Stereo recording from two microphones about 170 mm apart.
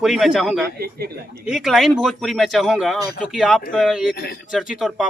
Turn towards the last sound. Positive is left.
turn(degrees=-5)  # may be behind; listen again after turning